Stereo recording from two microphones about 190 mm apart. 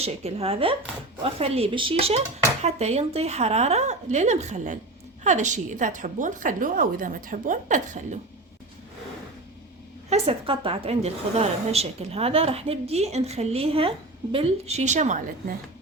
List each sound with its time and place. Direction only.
0.0 s a woman's voice: 35° right (ahead or behind)
10.1 s a woman's voice: 30° right (ahead or behind)